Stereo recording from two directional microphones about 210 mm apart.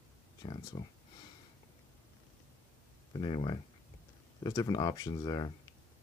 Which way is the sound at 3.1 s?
20° left (ahead or behind).